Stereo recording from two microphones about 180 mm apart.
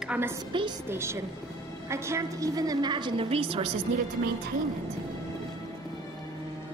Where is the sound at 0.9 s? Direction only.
15° right (ahead or behind); by 3.6 s 30° right (ahead or behind).